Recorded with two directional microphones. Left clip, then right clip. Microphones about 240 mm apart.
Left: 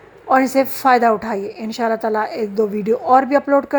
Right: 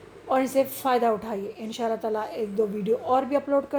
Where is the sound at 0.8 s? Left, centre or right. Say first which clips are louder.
Left 10 dB; left.